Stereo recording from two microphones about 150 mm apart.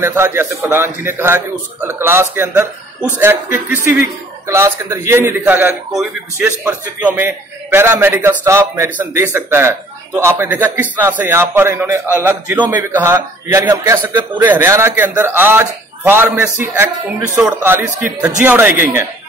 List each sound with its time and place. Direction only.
0.0 s a man's voice: 15° right (ahead or behind)